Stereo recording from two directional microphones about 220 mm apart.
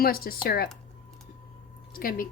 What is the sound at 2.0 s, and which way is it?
Speech, 40° left (ahead or behind).